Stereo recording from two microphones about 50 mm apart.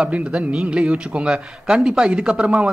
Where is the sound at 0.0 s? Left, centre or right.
Right.